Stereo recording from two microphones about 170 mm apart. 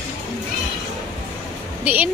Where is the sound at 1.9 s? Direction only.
10° right (ahead or behind).